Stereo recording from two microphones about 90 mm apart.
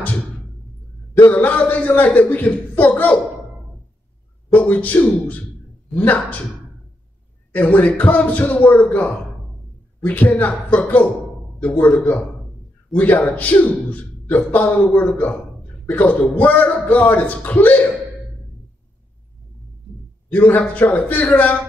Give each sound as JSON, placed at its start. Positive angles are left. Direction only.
{"t": 1.3, "sound": "a man's voice", "side_deg": 15}
{"t": 4.5, "sound": "a man's voice", "side_deg": 20}
{"t": 7.5, "sound": "a man's voice", "side_deg": 20}
{"t": 20.3, "sound": "a man's voice", "side_deg": 20}